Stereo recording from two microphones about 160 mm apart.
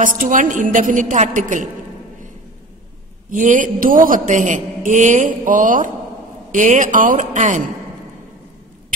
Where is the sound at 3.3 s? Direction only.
55° right (ahead or behind).